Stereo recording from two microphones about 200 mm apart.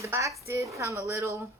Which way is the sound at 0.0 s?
15° right (ahead or behind).